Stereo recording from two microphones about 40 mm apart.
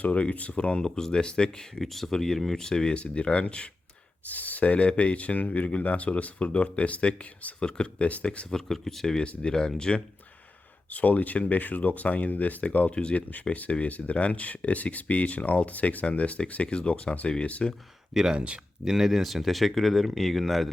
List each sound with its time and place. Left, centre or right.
0.0 s speech: left
0.8 s speech: centre
1.7 s speech: centre
2.9 s speech: left
4.3 s speech: left
8.4 s speech: centre
10.9 s speech: left
12.9 s speech: left
18.1 s speech: centre
18.3 s speech: right
18.9 s speech: centre